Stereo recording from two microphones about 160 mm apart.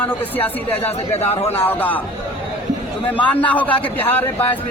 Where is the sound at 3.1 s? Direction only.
10° left (ahead or behind).